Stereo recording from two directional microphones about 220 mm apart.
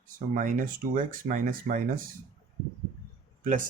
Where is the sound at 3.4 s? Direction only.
40° right (ahead or behind).